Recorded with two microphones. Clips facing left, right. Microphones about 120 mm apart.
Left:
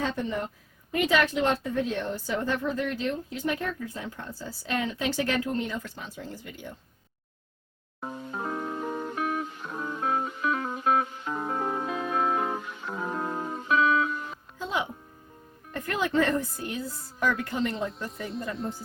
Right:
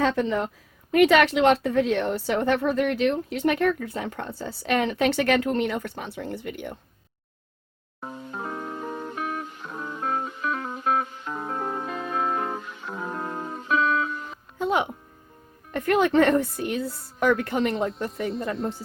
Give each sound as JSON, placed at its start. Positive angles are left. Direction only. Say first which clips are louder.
{"t": 0.0, "sound": "a woman's voice", "louder": "right 6 dB", "side_deg": -90}
{"t": 8.3, "sound": "music", "louder": "left 1 dB", "side_deg": 5}
{"t": 14.6, "sound": "music", "louder": "right 7 dB", "side_deg": -60}
{"t": 15.7, "sound": "speech", "louder": "right 7 dB", "side_deg": -65}
{"t": 18.5, "sound": "speech", "louder": "right 4 dB", "side_deg": 0}